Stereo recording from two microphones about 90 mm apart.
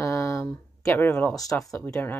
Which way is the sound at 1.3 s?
40° left (ahead or behind).